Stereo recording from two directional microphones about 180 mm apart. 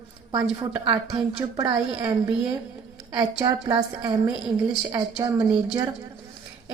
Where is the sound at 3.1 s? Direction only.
20° right (ahead or behind).